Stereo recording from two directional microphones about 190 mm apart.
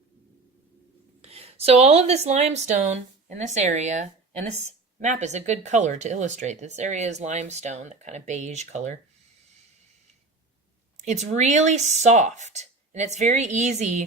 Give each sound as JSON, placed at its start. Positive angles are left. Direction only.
{"t": 1.2, "sound": "a woman's voice", "side_deg": -35}
{"t": 10.9, "sound": "speech", "side_deg": -35}